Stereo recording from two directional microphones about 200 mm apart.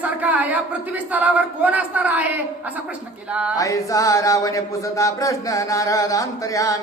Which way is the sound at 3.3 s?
5° right (ahead or behind).